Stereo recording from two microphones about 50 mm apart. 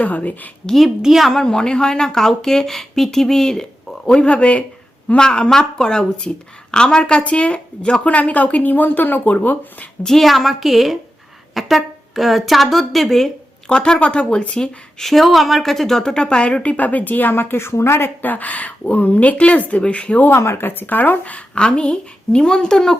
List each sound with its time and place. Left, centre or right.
0.0 s a woman's voice: left
1.0 s a woman's voice: centre
1.4 s speech: centre; by 8.7 s left
8.7 s a woman's voice: left
10.0 s a woman's voice: centre
13.7 s speech: centre
15.0 s speech: centre; by 16.7 s left
16.7 s a woman's voice: left
20.4 s speech: left; by 23.0 s centre